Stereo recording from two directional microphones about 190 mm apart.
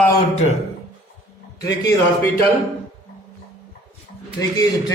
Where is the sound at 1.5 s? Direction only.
20° left (ahead or behind).